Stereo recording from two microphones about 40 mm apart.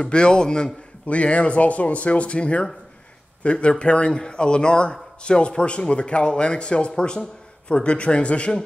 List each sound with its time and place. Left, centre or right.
0.0 s speech: centre
1.0 s speech: left